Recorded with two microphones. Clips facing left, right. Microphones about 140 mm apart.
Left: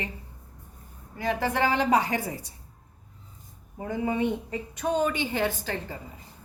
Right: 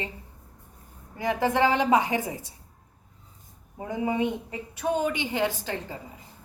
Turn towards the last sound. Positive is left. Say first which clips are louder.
# even
turn(degrees=-20)  # may be behind; listen again after turning